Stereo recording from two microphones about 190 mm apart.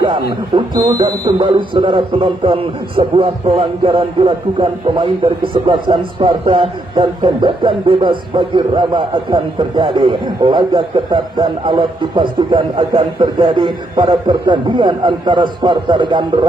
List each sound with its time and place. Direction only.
0.5 s speech: 25° right (ahead or behind)